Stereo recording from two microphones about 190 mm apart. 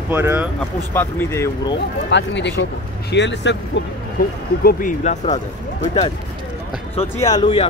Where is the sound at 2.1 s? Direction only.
70° left (ahead or behind).